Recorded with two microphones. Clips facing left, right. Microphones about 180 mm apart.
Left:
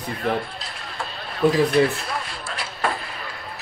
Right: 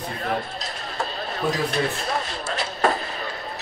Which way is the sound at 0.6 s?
40° right (ahead or behind).